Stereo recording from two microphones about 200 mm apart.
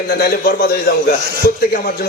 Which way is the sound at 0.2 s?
50° left (ahead or behind).